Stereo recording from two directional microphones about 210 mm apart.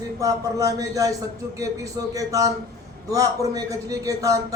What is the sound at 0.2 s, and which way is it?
Speech, 15° right (ahead or behind).